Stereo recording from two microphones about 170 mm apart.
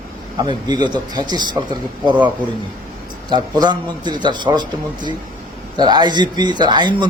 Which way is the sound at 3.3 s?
25° right (ahead or behind).